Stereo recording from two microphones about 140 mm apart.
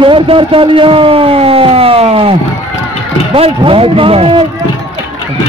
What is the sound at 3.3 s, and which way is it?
A man's voice, 40° right (ahead or behind).